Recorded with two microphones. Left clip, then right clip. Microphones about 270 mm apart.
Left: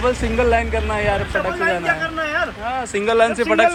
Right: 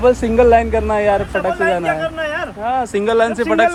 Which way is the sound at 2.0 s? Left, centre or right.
Right.